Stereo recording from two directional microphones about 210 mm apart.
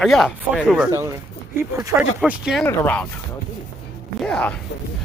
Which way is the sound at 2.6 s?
10° left (ahead or behind).